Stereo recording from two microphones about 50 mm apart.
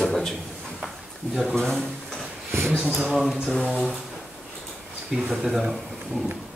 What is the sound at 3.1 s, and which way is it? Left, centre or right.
Speech, centre.